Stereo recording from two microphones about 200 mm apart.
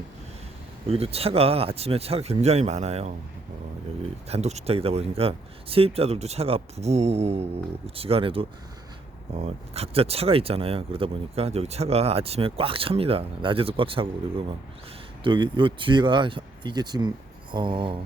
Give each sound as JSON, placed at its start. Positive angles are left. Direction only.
{"t": 0.9, "sound": "speech", "side_deg": -30}
{"t": 4.3, "sound": "speech", "side_deg": -35}